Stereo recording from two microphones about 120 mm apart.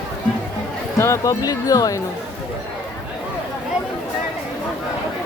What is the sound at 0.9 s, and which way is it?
Speech, 25° left (ahead or behind).